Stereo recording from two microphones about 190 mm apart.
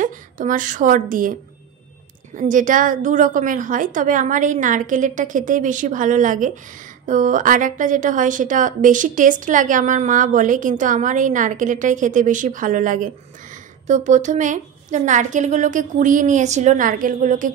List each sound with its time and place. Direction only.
0.0 s a woman's voice: 45° right (ahead or behind)
2.3 s a woman's voice: 45° right (ahead or behind)